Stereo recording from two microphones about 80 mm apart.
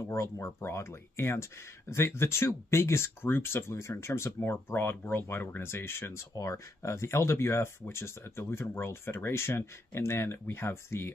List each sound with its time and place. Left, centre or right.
0.1 s speech: left
6.3 s speech: left